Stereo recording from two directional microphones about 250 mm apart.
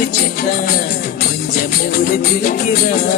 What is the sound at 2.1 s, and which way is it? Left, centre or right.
Music, left.